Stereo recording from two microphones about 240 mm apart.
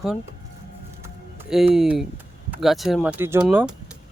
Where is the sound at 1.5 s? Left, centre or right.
Centre.